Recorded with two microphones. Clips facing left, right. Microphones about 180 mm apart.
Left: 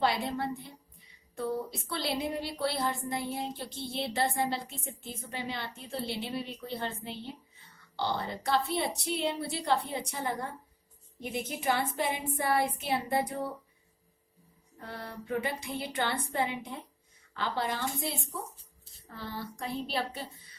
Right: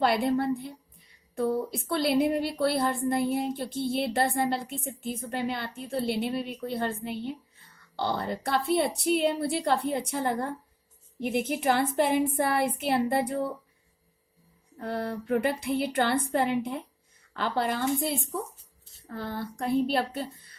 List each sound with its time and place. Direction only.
0.0 s speech: 55° right (ahead or behind)
14.8 s speech: 60° right (ahead or behind)